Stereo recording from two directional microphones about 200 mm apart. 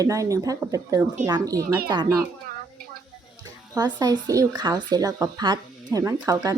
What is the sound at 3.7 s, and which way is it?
Speech, 20° right (ahead or behind).